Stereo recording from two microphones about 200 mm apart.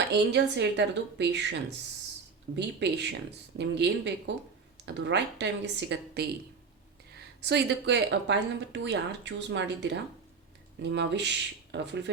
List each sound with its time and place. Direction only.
0.1 s speech: 60° right (ahead or behind)
2.6 s a woman's voice: 60° right (ahead or behind)
7.4 s speech: 60° right (ahead or behind)